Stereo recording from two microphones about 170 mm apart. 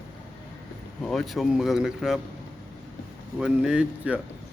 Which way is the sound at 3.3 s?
5° right (ahead or behind).